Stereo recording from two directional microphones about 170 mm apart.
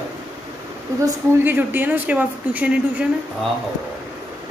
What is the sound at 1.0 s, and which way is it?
A woman's voice, 15° right (ahead or behind).